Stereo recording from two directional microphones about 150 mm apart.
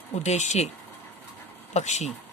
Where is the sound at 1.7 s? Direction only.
50° left (ahead or behind).